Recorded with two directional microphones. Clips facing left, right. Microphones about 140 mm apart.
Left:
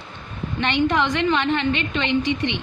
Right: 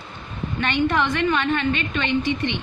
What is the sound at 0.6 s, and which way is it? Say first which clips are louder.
A woman's voice: left 1 dB; 15° left (ahead or behind).